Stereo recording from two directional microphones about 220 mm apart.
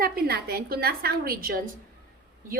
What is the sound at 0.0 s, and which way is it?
A woman's voice, 45° right (ahead or behind).